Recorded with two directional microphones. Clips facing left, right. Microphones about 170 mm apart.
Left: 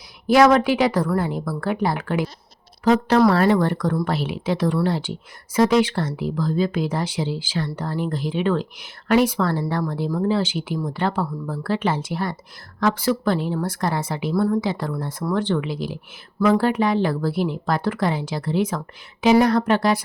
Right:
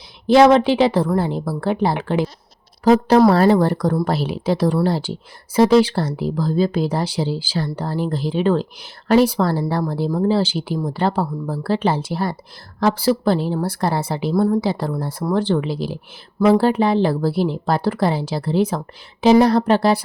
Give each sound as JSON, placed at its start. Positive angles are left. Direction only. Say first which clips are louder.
{"t": 0.3, "sound": "a woman's voice", "louder": "right 3 dB", "side_deg": -25}